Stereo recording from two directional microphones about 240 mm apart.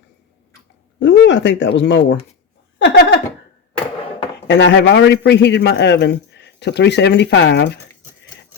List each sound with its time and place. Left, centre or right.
0.9 s speech: left
2.7 s a sound: left
4.4 s a man's voice: left